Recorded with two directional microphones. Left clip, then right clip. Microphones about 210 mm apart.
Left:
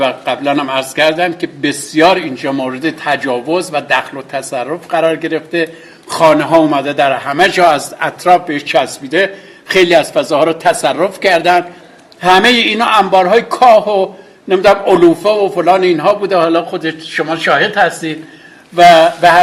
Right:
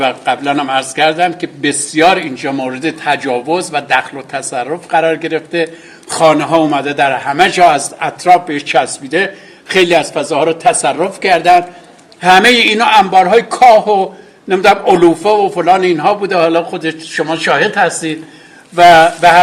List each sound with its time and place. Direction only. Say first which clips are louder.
0.0 s a man's voice: even; centre (ahead or behind)
17.2 s a man's voice: even; 20° right (ahead or behind)
17.7 s a man's voice: even; centre (ahead or behind)